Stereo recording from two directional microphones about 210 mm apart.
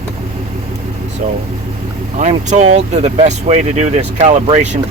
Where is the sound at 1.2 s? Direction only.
35° right (ahead or behind).